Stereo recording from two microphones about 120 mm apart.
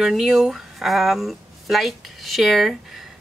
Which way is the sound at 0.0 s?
Centre (ahead or behind).